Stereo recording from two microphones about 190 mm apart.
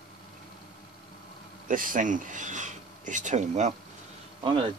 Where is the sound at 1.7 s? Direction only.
45° right (ahead or behind).